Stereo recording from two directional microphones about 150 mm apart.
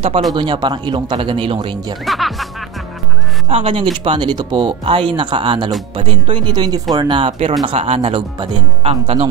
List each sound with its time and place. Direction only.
0.3 s speech: 30° right (ahead or behind)
2.0 s speech: centre (ahead or behind)
3.4 s speech: 35° right (ahead or behind)